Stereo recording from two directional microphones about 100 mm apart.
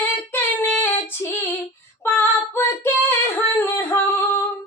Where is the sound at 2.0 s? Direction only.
20° left (ahead or behind).